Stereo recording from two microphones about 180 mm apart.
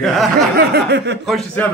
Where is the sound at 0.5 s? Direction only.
65° right (ahead or behind).